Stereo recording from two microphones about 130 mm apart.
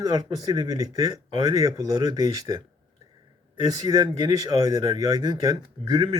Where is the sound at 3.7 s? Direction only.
30° right (ahead or behind).